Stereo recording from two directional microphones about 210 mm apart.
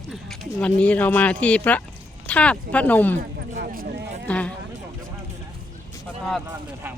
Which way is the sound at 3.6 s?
45° right (ahead or behind).